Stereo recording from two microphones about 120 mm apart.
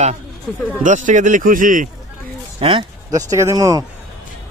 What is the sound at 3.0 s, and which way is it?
Speech, 30° right (ahead or behind).